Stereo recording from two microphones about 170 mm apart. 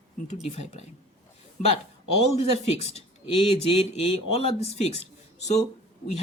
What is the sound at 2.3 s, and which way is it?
Speech, 40° left (ahead or behind).